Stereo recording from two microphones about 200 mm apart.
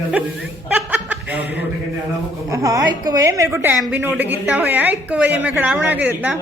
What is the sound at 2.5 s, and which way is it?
A woman's voice, 15° right (ahead or behind).